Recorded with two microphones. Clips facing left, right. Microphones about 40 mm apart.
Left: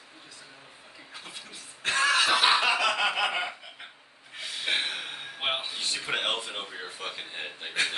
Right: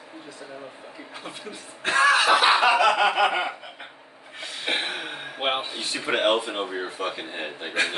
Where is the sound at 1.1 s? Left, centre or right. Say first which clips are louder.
Right 5 dB; right.